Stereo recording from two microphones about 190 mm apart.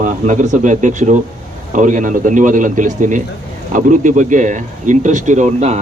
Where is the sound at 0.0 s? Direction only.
40° right (ahead or behind).